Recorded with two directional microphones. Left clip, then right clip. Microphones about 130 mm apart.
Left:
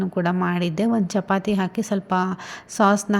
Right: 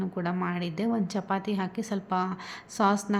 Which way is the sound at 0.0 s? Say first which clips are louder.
Left 8 dB; 40° left (ahead or behind).